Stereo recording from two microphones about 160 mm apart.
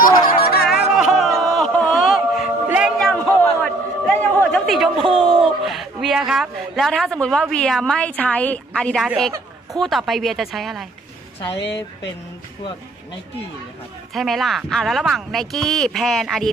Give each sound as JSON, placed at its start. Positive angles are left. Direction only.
{"t": 0.3, "sound": "music", "side_deg": 90}
{"t": 0.9, "sound": "a sound", "side_deg": 0}
{"t": 2.6, "sound": "music", "side_deg": -5}
{"t": 3.4, "sound": "a sound", "side_deg": 10}
{"t": 9.8, "sound": "speech", "side_deg": 0}
{"t": 11.5, "sound": "speech", "side_deg": 90}
{"t": 14.1, "sound": "speech", "side_deg": 0}